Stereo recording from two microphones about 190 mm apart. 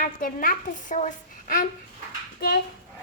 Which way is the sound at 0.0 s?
50° left (ahead or behind).